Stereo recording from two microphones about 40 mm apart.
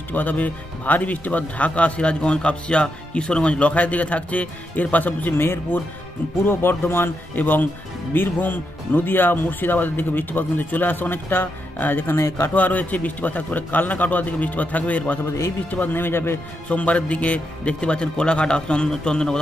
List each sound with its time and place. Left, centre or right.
0.1 s speech: left
5.4 s speech: left
7.3 s speech: left
15.7 s speech: left
16.6 s speech: left